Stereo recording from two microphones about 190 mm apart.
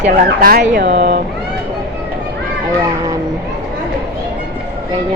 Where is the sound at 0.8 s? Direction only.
65° right (ahead or behind).